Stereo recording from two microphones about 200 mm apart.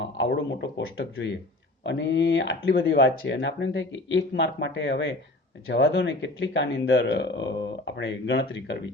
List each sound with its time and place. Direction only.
0.0 s speech: 60° left (ahead or behind)